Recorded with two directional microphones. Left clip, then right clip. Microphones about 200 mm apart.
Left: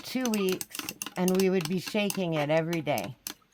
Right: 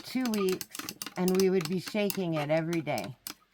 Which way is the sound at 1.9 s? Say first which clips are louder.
Left 2 dB; 40° left (ahead or behind).